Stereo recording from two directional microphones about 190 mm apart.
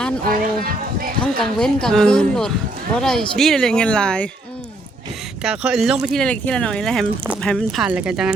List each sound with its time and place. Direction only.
0.6 s speech: 50° right (ahead or behind)
1.2 s speech: 5° left (ahead or behind)
5.4 s speech: centre (ahead or behind)